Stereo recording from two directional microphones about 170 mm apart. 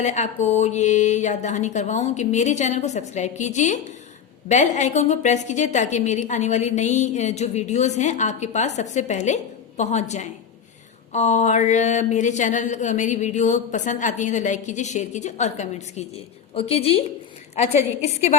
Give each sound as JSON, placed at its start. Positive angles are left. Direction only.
{"t": 0.0, "sound": "a woman's voice", "side_deg": 40}